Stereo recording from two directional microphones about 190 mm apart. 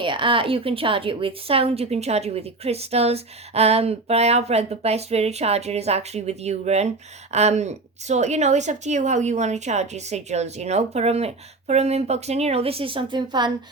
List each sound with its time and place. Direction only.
0.0 s a woman's voice: 25° right (ahead or behind)